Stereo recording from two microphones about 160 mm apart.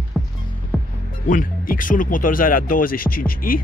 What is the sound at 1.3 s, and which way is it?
Speech, 55° left (ahead or behind).